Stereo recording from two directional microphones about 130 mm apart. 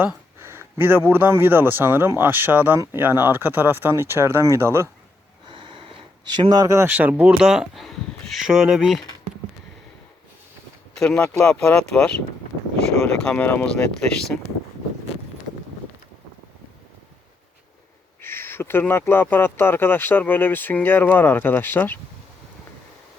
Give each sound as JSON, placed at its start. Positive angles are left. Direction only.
{"t": 0.0, "sound": "speech", "side_deg": -15}
{"t": 5.5, "sound": "a sound", "side_deg": -40}
{"t": 6.3, "sound": "speech", "side_deg": -35}
{"t": 6.9, "sound": "speech", "side_deg": -10}
{"t": 10.9, "sound": "speech", "side_deg": 5}
{"t": 13.2, "sound": "speech", "side_deg": 10}
{"t": 18.2, "sound": "speech", "side_deg": 15}